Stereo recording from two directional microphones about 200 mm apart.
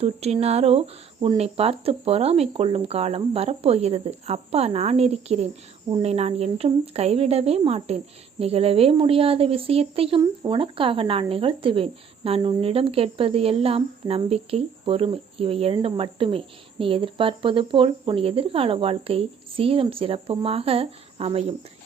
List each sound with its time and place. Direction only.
0.0 s speech: 30° right (ahead or behind)